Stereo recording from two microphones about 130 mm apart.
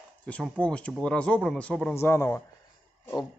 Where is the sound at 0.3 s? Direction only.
10° left (ahead or behind).